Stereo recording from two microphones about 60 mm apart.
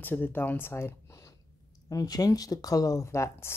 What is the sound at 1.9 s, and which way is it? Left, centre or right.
Speech, left.